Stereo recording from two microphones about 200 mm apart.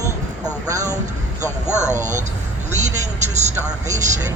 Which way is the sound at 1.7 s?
35° right (ahead or behind).